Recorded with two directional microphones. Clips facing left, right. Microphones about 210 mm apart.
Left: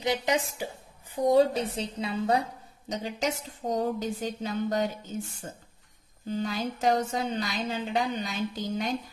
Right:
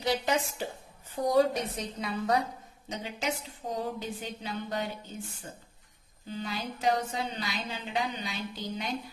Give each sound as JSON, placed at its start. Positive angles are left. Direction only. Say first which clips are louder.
{"t": 0.0, "sound": "a woman's voice", "louder": "left 2 dB", "side_deg": 20}
{"t": 2.9, "sound": "a woman's voice", "louder": "left 4 dB", "side_deg": 40}